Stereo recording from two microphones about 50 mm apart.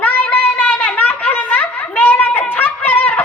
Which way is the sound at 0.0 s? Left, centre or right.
Left.